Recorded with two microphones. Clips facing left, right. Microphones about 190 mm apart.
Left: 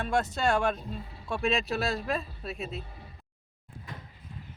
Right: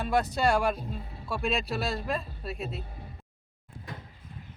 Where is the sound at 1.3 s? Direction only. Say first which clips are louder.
Left 1 dB; centre (ahead or behind).